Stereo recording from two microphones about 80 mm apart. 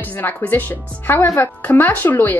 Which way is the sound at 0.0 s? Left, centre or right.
Left.